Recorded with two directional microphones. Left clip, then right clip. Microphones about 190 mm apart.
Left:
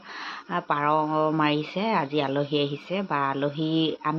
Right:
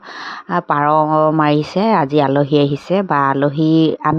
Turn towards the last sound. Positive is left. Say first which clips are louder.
# right 12 dB
turn(degrees=-65)  # may be behind; listen again after turning